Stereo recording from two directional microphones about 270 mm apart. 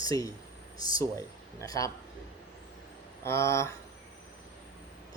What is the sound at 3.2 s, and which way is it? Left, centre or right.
Speech, centre.